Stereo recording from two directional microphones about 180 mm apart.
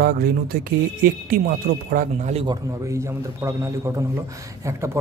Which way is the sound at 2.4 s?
20° right (ahead or behind).